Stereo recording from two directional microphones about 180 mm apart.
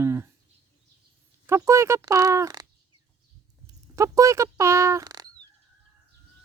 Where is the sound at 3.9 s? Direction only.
15° right (ahead or behind).